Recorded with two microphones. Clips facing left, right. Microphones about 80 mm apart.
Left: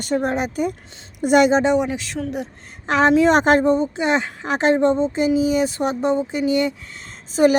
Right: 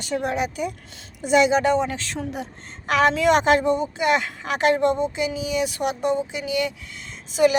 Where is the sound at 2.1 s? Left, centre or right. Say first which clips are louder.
Left 4 dB; centre.